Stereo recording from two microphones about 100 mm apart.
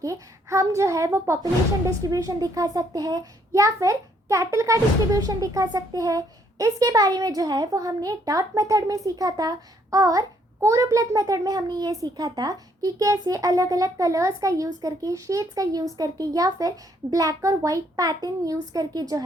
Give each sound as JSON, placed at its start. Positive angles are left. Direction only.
{"t": 0.0, "sound": "speech", "side_deg": -30}